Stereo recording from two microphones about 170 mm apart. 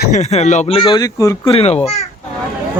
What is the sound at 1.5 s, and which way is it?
Speech, 35° left (ahead or behind).